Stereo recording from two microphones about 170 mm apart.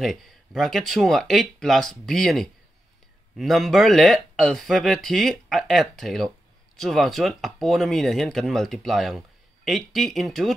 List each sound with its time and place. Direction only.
0.0 s speech: centre (ahead or behind)